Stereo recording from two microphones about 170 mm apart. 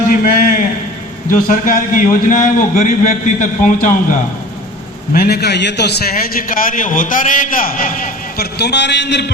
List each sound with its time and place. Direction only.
0.1 s a sound: 55° left (ahead or behind)
1.3 s a man's voice: 55° left (ahead or behind)
5.1 s a man's voice: 65° left (ahead or behind); by 9.3 s 90° left